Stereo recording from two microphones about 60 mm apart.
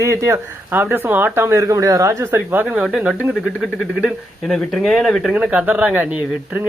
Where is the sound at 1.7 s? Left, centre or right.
Right.